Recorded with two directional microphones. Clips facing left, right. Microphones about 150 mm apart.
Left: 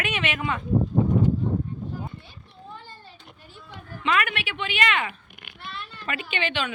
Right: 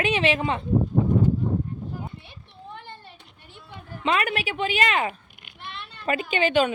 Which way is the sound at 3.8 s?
30° right (ahead or behind).